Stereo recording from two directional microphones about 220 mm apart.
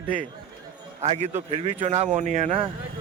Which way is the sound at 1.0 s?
30° right (ahead or behind).